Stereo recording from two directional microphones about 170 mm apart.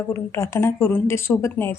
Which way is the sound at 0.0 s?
15° left (ahead or behind).